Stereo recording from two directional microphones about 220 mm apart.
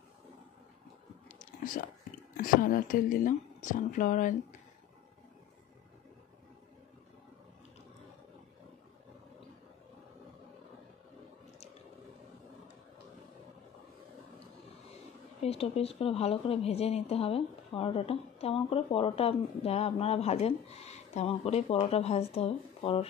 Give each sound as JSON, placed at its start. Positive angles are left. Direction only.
{"t": 1.6, "sound": "a woman's voice", "side_deg": 40}
{"t": 15.4, "sound": "a woman's voice", "side_deg": 30}